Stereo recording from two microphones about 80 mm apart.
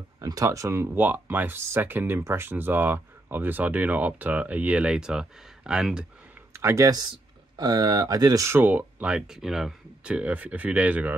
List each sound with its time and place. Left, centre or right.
0.2 s speech: right; by 6.0 s centre
6.5 s speech: right
7.5 s speech: right
8.5 s speech: right